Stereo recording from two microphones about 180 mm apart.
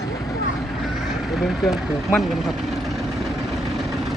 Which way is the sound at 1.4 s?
Centre (ahead or behind).